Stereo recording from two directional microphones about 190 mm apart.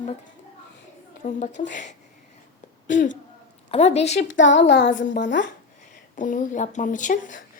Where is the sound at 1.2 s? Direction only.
40° left (ahead or behind).